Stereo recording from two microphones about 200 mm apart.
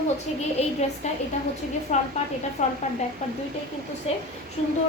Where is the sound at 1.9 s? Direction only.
35° left (ahead or behind).